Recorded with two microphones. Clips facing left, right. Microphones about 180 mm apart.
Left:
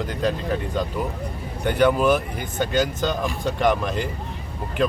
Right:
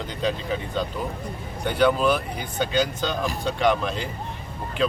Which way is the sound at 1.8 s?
10° left (ahead or behind).